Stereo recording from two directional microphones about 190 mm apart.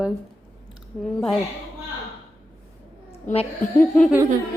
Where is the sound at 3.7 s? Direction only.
10° left (ahead or behind).